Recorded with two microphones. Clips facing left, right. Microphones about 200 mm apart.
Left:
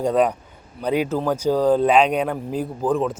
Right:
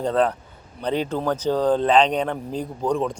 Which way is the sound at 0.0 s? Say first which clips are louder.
Left 2 dB; 10° left (ahead or behind).